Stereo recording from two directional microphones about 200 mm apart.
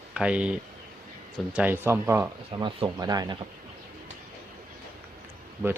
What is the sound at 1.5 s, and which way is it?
Speech, 10° right (ahead or behind).